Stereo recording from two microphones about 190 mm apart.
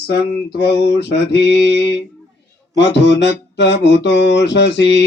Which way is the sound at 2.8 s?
65° left (ahead or behind).